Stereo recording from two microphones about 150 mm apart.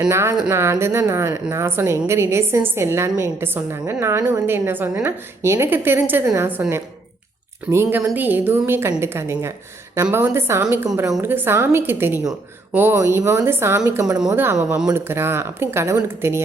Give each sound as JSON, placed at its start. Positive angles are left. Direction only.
{"t": 0.1, "sound": "a woman's voice", "side_deg": -15}